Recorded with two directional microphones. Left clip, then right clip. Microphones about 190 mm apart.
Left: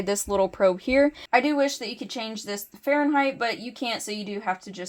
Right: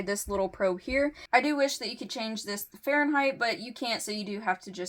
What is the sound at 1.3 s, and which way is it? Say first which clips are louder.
A woman's voice: left 3 dB; 30° left (ahead or behind).